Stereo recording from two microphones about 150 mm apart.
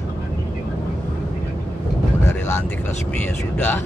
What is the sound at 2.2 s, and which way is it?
Speech, 15° left (ahead or behind).